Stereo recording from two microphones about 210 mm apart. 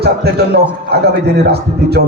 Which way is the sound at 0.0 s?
50° right (ahead or behind).